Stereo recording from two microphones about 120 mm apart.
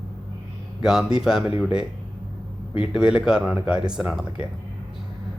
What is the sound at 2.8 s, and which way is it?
Speech, 5° right (ahead or behind).